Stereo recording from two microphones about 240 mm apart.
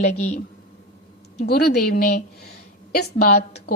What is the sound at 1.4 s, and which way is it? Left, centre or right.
A woman's voice, left.